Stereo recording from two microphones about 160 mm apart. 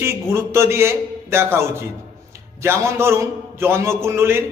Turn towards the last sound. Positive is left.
turn(degrees=-15)  # may be behind; listen again after turning